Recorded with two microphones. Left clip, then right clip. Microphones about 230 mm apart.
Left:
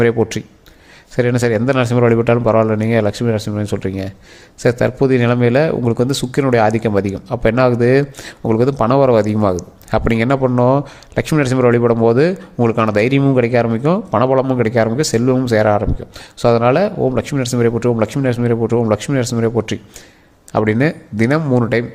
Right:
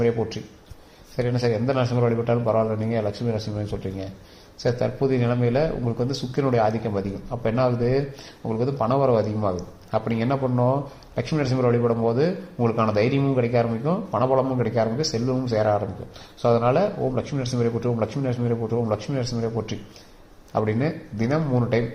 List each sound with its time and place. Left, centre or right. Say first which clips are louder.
0.0 s speech: left 9 dB; left